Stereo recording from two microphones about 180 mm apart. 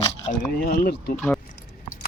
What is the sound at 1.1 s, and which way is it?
Speech, 5° left (ahead or behind).